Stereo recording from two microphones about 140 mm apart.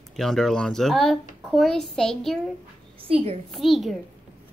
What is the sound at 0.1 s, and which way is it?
Speech, centre (ahead or behind).